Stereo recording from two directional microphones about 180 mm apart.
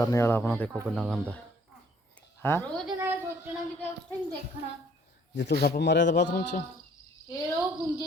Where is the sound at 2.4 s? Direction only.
10° left (ahead or behind).